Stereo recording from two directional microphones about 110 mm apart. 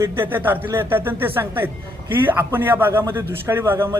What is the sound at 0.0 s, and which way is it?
Speech, 20° right (ahead or behind).